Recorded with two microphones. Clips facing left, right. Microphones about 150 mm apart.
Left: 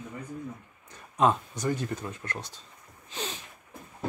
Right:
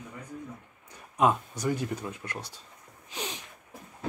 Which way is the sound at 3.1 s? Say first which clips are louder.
Left 1 dB; 15° right (ahead or behind).